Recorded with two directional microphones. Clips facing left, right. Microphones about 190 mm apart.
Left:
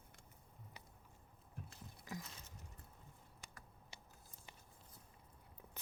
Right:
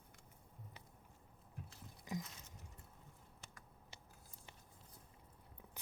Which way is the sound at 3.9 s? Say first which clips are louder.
Left 1 dB; 15° left (ahead or behind).